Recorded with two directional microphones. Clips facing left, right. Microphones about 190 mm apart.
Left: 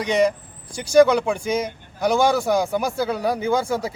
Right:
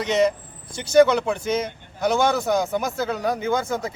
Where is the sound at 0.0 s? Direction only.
10° left (ahead or behind).